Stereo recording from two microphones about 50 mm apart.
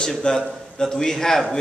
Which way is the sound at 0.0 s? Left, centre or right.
Centre.